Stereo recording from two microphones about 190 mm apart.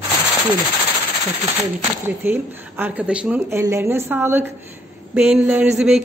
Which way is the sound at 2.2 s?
10° right (ahead or behind).